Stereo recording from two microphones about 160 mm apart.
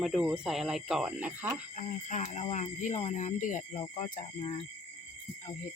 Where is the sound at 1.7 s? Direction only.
45° left (ahead or behind).